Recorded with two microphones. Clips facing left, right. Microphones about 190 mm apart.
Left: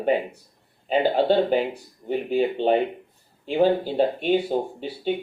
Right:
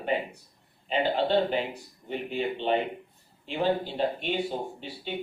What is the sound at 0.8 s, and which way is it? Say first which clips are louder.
Speech: left 6 dB; 40° left (ahead or behind).